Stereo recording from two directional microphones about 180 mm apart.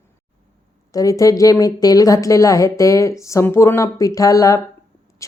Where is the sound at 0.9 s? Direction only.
20° left (ahead or behind).